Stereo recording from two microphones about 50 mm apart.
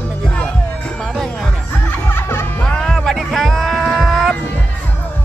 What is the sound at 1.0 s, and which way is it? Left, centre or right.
Music, centre.